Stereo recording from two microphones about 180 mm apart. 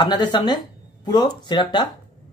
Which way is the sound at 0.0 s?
25° left (ahead or behind).